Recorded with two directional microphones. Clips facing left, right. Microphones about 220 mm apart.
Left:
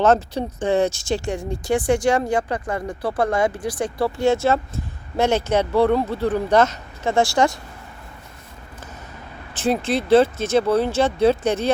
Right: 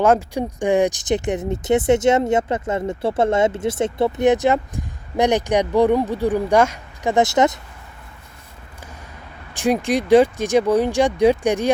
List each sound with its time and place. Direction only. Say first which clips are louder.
0.0 s speech: right 1 dB; 10° right (ahead or behind)
9.6 s speech: right 2 dB; 15° right (ahead or behind)